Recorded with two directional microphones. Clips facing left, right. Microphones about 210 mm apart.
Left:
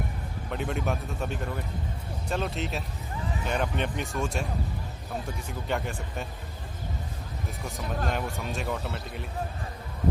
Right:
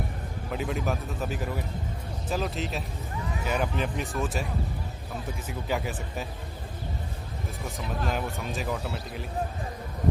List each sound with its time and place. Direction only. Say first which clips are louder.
0.5 s speech: even; centre (ahead or behind)
5.5 s speech: right 1 dB; 5° right (ahead or behind)
7.6 s speech: even; centre (ahead or behind)